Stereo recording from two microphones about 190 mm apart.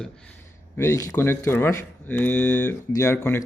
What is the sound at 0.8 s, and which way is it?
Speech, 15° left (ahead or behind).